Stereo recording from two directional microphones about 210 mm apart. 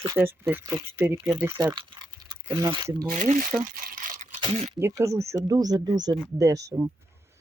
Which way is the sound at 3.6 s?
40° right (ahead or behind).